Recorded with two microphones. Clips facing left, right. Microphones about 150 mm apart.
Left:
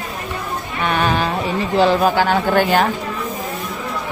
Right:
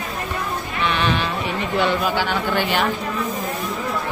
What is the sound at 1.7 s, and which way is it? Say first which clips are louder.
Speech: left 6 dB; 40° left (ahead or behind).